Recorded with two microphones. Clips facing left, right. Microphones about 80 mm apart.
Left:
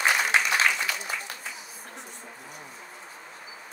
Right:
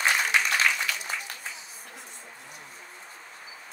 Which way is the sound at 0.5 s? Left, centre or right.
Centre.